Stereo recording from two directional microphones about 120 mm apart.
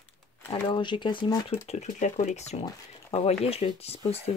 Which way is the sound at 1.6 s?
80° left.